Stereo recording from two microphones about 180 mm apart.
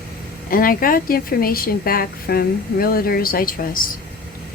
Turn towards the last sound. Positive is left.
turn(degrees=50)  # may be behind; listen again after turning